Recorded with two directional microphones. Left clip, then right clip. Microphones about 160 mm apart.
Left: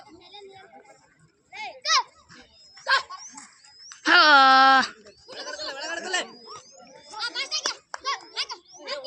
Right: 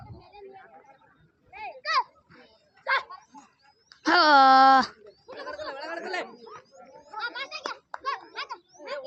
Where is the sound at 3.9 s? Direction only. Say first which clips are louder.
Left 3 dB; 20° right (ahead or behind).